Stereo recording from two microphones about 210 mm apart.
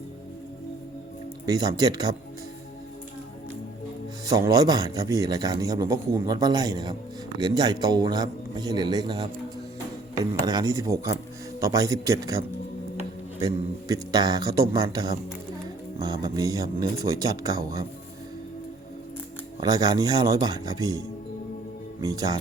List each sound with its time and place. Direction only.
1.5 s speech: 20° right (ahead or behind)
4.3 s a man's voice: 15° right (ahead or behind)
13.4 s a man's voice: 15° right (ahead or behind)
19.5 s speech: 20° right (ahead or behind)